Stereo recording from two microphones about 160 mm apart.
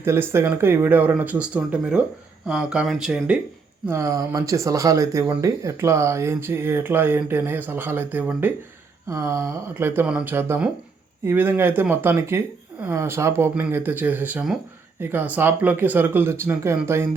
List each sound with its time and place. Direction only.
0.0 s speech: 15° right (ahead or behind)
3.8 s speech: 20° right (ahead or behind)